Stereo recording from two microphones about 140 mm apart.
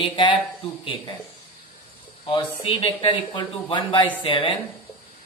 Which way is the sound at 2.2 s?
40° left (ahead or behind).